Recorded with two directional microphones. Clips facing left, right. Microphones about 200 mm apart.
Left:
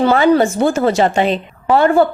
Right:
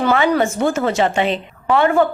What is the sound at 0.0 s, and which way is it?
A woman's voice, 35° left (ahead or behind).